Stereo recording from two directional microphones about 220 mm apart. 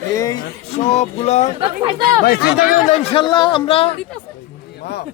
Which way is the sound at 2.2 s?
45° left (ahead or behind).